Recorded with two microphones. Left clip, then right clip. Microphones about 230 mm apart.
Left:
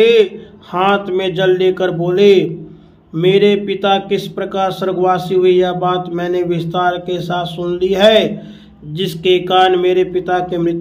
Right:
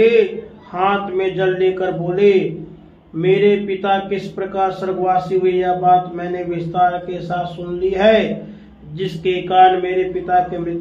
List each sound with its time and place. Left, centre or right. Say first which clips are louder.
0.7 s speech: left 3 dB; left